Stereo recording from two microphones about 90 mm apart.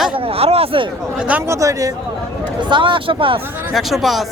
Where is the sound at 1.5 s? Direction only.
35° right (ahead or behind).